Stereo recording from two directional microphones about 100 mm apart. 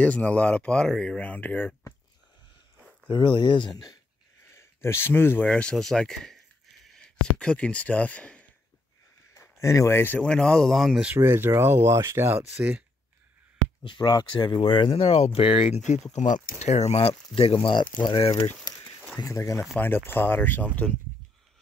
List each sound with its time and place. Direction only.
0.0 s speech: 15° left (ahead or behind)
3.1 s speech: 50° left (ahead or behind)
4.5 s speech: 25° left (ahead or behind)
5.5 s speech: 10° left (ahead or behind)
9.3 s speech: 30° left (ahead or behind); by 11.1 s 5° right (ahead or behind)
11.1 s speech: 25° right (ahead or behind)
13.8 s speech: 50° left (ahead or behind)
15.0 s speech: 90° left; by 15.6 s 70° left (ahead or behind)
16.8 s speech: 90° left
17.4 s speech: 60° left (ahead or behind)
18.0 s speech: 65° left (ahead or behind)
18.6 s a sound: 40° left (ahead or behind)
19.2 s speech: 30° left (ahead or behind)
19.8 s speech: 20° left (ahead or behind)